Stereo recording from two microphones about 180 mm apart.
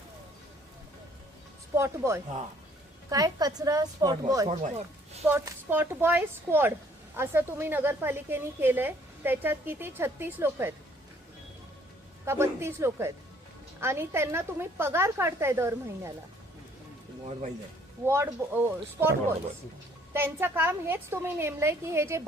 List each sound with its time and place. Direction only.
1.7 s a woman's voice: 15° right (ahead or behind)
4.4 s speech: 40° right (ahead or behind)
5.3 s a woman's voice: 15° right (ahead or behind)
12.2 s a woman's voice: 15° right (ahead or behind)
18.0 s a woman's voice: 15° right (ahead or behind)
20.1 s a woman's voice: 10° right (ahead or behind)